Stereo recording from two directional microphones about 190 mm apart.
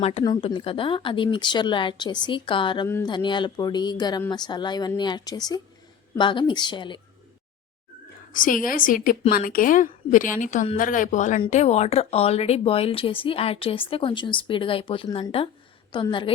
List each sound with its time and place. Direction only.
0.0 s a woman's voice: 30° left (ahead or behind)
8.3 s a woman's voice: 45° left (ahead or behind); by 16.1 s 25° left (ahead or behind)